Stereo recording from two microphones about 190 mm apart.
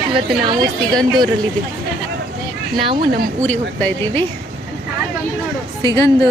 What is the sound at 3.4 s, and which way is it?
Speech, 10° left (ahead or behind).